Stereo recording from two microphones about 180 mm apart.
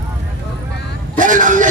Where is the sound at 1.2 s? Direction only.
45° right (ahead or behind).